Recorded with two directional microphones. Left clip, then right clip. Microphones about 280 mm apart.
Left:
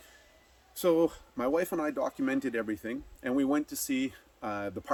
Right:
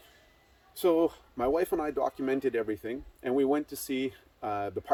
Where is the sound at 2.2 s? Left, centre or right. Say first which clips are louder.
Right 3 dB; centre.